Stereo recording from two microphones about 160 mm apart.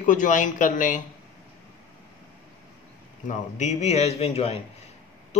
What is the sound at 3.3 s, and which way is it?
A man's voice, 45° left (ahead or behind).